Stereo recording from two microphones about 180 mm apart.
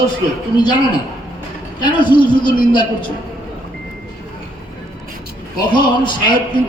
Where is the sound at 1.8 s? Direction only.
25° left (ahead or behind).